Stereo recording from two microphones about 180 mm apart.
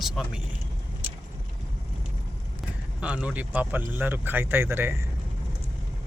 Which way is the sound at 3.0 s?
5° right (ahead or behind).